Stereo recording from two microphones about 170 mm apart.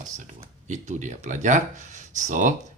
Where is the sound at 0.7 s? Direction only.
45° right (ahead or behind).